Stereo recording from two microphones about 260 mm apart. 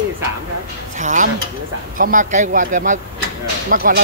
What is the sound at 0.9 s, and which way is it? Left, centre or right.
Speech, right.